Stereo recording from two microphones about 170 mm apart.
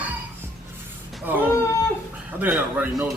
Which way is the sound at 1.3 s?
10° right (ahead or behind).